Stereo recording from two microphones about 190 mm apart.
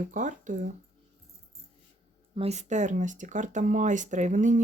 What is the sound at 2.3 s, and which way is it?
Speech, 35° right (ahead or behind).